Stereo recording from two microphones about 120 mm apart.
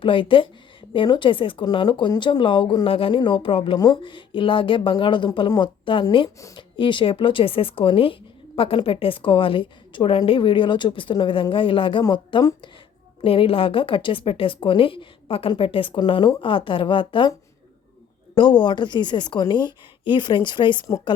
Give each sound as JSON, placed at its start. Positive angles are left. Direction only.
{"t": 0.0, "sound": "speech", "side_deg": 45}
{"t": 13.2, "sound": "speech", "side_deg": 50}
{"t": 18.3, "sound": "a woman's voice", "side_deg": 40}